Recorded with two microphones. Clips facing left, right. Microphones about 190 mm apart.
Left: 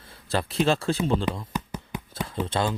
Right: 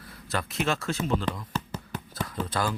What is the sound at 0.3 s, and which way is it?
Speech, 30° left (ahead or behind).